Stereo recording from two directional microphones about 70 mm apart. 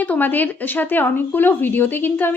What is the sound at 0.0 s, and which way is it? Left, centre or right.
A woman's voice, left.